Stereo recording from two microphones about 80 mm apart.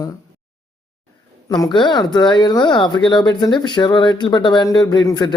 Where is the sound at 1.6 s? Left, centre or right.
Left.